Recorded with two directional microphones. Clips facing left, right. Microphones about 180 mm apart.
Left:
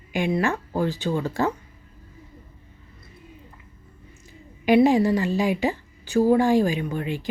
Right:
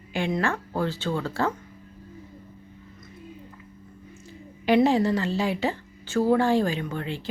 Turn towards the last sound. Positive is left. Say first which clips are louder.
# left 3 dB
turn(degrees=15)  # may be behind; listen again after turning